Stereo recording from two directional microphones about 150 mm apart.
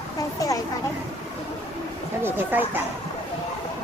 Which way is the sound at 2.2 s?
15° right (ahead or behind).